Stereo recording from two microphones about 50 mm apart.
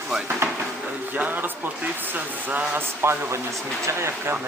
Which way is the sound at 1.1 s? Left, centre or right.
Right.